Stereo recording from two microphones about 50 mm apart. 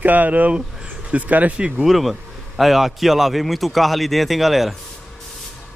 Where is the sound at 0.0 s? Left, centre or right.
Right.